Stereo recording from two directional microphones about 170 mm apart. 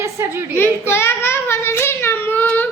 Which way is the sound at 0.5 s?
15° left (ahead or behind).